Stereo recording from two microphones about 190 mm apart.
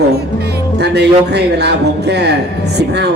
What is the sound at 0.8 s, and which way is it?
A man's voice, 60° right (ahead or behind).